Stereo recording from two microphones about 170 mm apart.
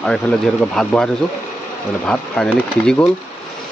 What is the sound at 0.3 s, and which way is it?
Speech, 5° left (ahead or behind).